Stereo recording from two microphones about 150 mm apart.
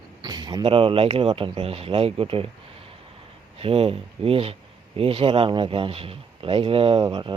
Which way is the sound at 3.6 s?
40° right (ahead or behind).